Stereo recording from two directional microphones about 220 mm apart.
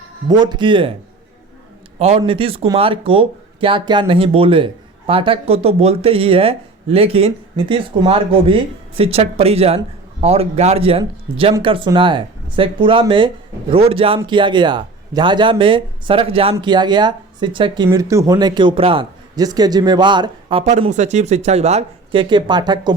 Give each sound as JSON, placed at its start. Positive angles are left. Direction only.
{"t": 0.3, "sound": "speech", "side_deg": -20}
{"t": 2.0, "sound": "speech", "side_deg": -25}